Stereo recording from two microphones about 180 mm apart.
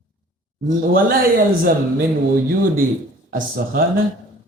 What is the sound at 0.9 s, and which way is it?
Speech, 55° right (ahead or behind).